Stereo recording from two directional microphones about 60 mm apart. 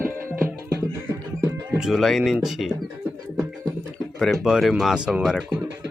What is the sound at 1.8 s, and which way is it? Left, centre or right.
Speech, centre.